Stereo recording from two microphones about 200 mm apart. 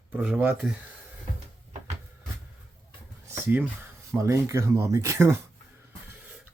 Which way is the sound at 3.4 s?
10° right (ahead or behind).